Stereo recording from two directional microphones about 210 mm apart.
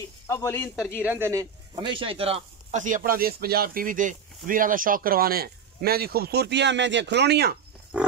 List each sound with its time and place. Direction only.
0.3 s speech: 15° left (ahead or behind)
1.0 s speech: 10° right (ahead or behind); by 7.5 s 50° right (ahead or behind)